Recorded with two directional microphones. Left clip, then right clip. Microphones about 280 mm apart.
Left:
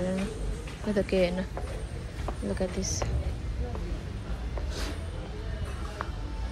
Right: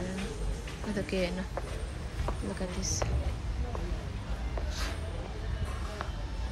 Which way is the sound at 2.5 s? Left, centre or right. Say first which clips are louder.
Left 4 dB; centre.